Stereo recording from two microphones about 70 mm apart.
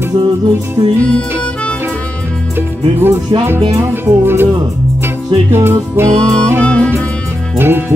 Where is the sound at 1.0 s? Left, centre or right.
Centre.